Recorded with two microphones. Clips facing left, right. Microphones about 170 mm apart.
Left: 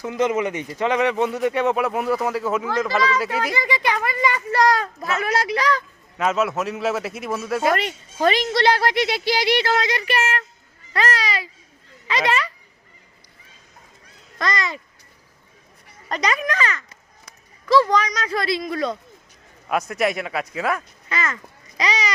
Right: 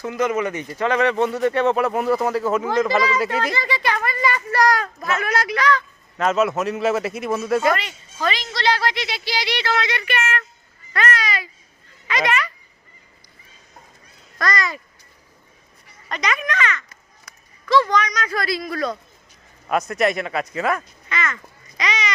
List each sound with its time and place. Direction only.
0.0 s a man's voice: 20° left (ahead or behind); by 2.6 s 5° left (ahead or behind)
2.8 s speech: 10° right (ahead or behind)
3.2 s a child's voice: 5° left (ahead or behind); by 5.8 s 35° left (ahead or behind)
6.1 s a man's voice: 5° left (ahead or behind)
7.8 s a child's voice: 55° left (ahead or behind); by 12.5 s 30° left (ahead or behind)
14.3 s speech: 25° left (ahead or behind)
16.0 s speech: 35° left (ahead or behind)
19.6 s a man's voice: 5° left (ahead or behind)
21.1 s a child's voice: 35° left (ahead or behind)
21.8 s a sound: 35° left (ahead or behind)